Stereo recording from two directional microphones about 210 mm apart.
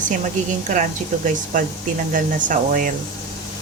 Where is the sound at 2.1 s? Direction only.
40° right (ahead or behind).